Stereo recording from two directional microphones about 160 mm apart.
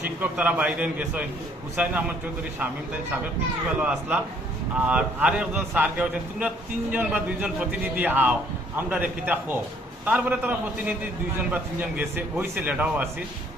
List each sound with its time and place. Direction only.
0.2 s a man's voice: 10° right (ahead or behind)
3.8 s a man's voice: 10° right (ahead or behind)